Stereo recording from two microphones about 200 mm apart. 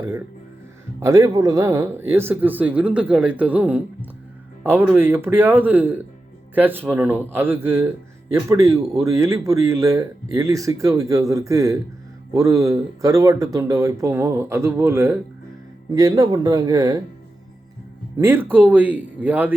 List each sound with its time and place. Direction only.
0.9 s speech: 15° right (ahead or behind)
18.2 s speech: 10° right (ahead or behind)